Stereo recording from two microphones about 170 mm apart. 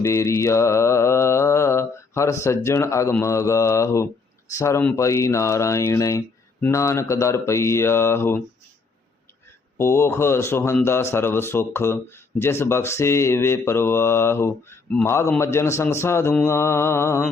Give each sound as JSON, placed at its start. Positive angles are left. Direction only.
{"t": 0.0, "sound": "speech", "side_deg": 15}
{"t": 9.7, "sound": "speech", "side_deg": 15}